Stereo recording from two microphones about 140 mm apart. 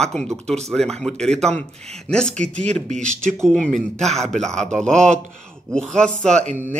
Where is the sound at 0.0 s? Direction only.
5° left (ahead or behind).